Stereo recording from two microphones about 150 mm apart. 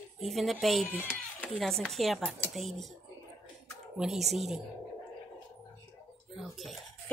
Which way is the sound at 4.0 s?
Centre (ahead or behind).